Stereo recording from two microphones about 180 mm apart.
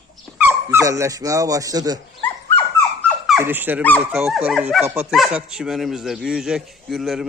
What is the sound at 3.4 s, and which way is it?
Speech, 10° right (ahead or behind).